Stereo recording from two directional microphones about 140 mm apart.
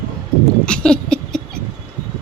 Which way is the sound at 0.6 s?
5° left (ahead or behind).